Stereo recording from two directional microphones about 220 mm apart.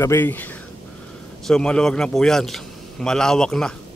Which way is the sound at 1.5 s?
5° left (ahead or behind).